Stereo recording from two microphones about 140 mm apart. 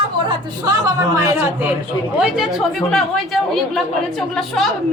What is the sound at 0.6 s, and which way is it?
A woman's voice, 20° right (ahead or behind).